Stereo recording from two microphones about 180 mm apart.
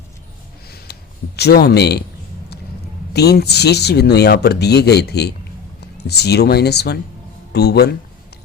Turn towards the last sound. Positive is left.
turn(degrees=65)  # may be behind; listen again after turning